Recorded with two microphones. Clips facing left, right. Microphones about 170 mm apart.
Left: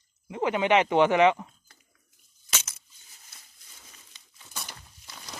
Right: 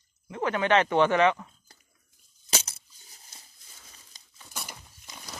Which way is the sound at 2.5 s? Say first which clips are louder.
Right 4 dB; 35° right (ahead or behind).